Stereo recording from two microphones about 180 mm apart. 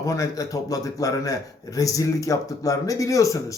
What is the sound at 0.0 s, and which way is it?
A man's voice, 20° left (ahead or behind).